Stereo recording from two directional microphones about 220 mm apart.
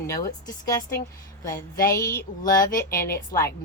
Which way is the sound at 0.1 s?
15° left (ahead or behind).